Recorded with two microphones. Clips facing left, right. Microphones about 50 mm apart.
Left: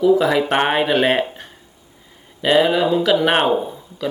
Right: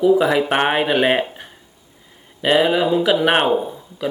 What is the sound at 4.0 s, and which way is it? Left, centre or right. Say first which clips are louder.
Speech: even; centre.